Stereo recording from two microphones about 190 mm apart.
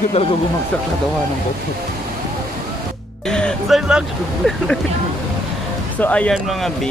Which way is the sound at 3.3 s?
5° left (ahead or behind).